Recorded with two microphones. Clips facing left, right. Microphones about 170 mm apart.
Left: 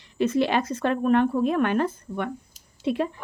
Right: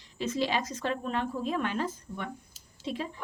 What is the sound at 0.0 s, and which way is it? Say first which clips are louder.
A woman's voice: left 8 dB; 60° left (ahead or behind).